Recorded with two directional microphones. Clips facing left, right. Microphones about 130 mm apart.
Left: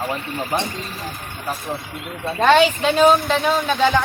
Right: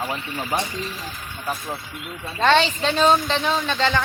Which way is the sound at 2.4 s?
5° left (ahead or behind).